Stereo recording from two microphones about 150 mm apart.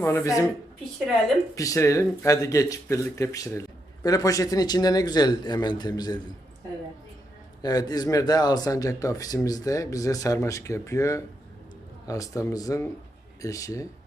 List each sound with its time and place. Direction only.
0.0 s speech: 20° left (ahead or behind)
1.5 s speech: 20° left (ahead or behind)
7.6 s speech: 25° left (ahead or behind)